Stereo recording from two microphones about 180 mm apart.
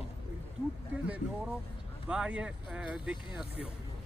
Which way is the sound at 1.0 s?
5° right (ahead or behind).